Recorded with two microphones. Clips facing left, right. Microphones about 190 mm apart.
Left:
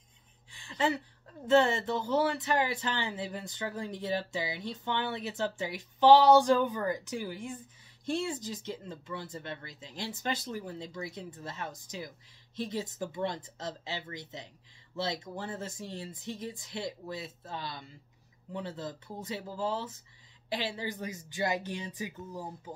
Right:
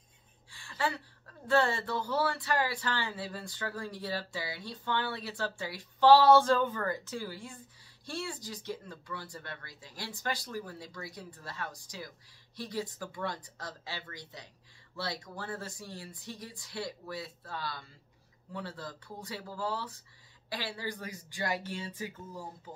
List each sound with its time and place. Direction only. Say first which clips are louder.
0.5 s speech: left 4 dB; 20° left (ahead or behind)